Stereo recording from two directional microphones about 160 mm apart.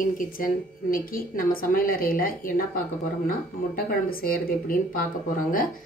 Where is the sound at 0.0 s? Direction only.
60° left (ahead or behind).